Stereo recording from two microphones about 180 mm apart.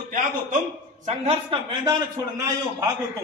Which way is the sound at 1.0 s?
35° right (ahead or behind).